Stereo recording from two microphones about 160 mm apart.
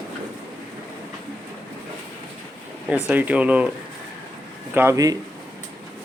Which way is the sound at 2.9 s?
10° right (ahead or behind).